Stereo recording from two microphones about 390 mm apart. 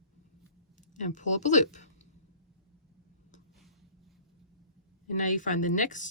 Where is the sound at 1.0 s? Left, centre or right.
Centre.